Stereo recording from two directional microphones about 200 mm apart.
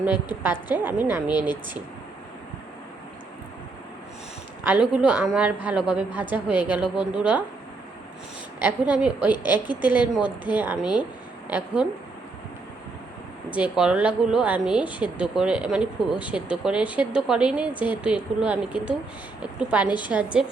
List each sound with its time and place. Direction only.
0.4 s a woman's voice: 10° right (ahead or behind)
1.4 s speech: 20° left (ahead or behind)
4.6 s a woman's voice: 5° right (ahead or behind)
8.6 s a woman's voice: 5° right (ahead or behind)
13.6 s a woman's voice: 5° right (ahead or behind)